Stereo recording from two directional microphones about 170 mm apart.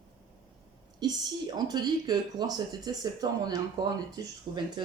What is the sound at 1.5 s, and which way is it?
Speech, 25° right (ahead or behind).